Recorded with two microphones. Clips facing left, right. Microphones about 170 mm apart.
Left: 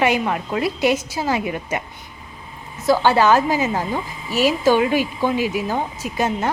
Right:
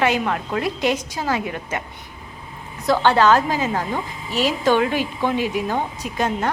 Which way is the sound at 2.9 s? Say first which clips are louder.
Left 1 dB; 10° left (ahead or behind).